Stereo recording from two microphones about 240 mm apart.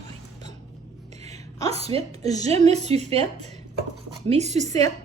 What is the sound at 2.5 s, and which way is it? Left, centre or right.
Speech, right.